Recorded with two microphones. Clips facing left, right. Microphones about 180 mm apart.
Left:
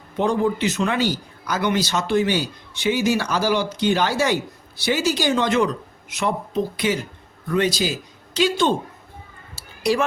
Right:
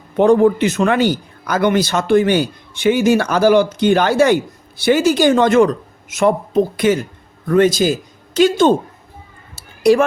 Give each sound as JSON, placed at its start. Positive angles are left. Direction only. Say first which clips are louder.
{"t": 0.2, "sound": "a man's voice", "louder": "right 9 dB", "side_deg": -55}
{"t": 9.8, "sound": "speech", "louder": "right 9 dB", "side_deg": -50}